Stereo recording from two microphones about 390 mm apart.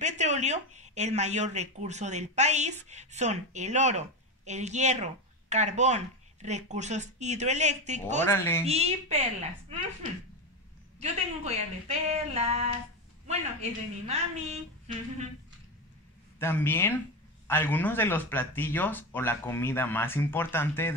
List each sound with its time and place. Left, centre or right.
0.0 s speech: centre
8.3 s speech: centre
8.6 s speech: centre
11.0 s speech: centre
16.3 s speech: centre